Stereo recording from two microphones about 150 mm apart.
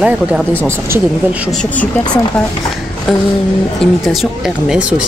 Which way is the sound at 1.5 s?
5° left (ahead or behind).